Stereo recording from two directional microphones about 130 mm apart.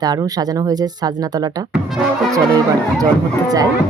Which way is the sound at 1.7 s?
5° right (ahead or behind).